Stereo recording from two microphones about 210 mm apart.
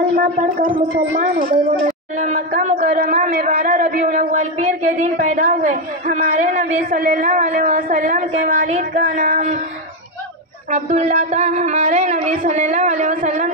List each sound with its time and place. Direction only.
0.2 s a woman's voice: 35° right (ahead or behind)
10.7 s speech: 30° right (ahead or behind)